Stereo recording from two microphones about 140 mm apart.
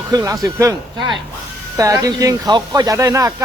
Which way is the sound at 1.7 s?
25° right (ahead or behind).